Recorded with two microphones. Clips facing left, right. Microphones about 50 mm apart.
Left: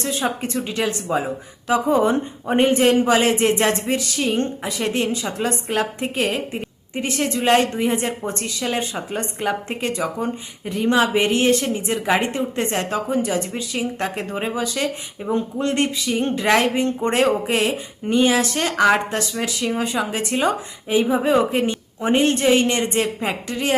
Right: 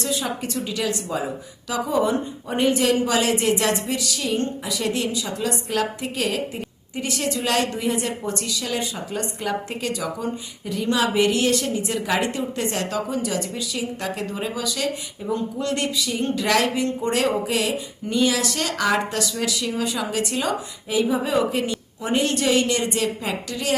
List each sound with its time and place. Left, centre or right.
0.0 s a woman's voice: left